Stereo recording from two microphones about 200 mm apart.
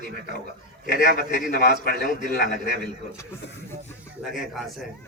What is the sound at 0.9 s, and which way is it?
A man's voice, 50° left (ahead or behind).